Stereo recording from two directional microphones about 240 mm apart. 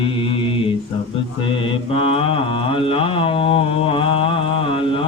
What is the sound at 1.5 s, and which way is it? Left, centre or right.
Mantra, left.